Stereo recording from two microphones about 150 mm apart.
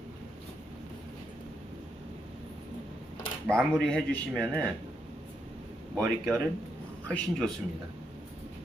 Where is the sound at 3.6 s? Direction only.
5° left (ahead or behind).